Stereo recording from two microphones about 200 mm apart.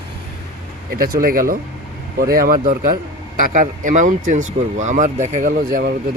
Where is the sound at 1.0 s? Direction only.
45° right (ahead or behind).